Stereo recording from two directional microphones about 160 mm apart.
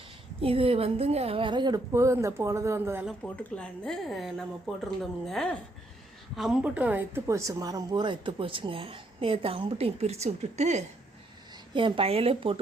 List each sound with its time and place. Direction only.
0.4 s a woman's voice: 35° right (ahead or behind); by 3.1 s 15° right (ahead or behind)
3.1 s speech: 5° left (ahead or behind); by 10.8 s 45° right (ahead or behind)
11.7 s speech: 30° right (ahead or behind)